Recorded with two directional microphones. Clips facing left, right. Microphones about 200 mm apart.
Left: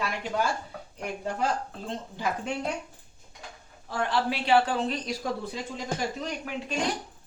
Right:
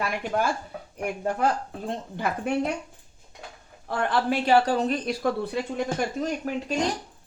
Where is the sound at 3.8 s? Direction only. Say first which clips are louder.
Right 3 dB; 55° right (ahead or behind).